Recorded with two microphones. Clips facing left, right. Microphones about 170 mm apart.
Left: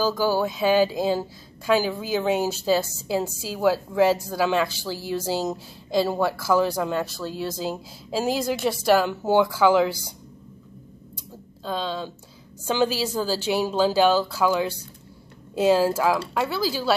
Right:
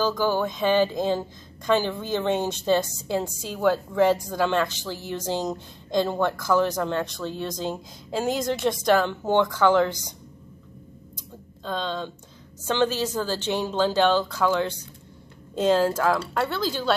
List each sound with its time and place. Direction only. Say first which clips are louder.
0.0 s a woman's voice: left 1 dB; 10° left (ahead or behind)
11.6 s a woman's voice: left 1 dB; 5° left (ahead or behind)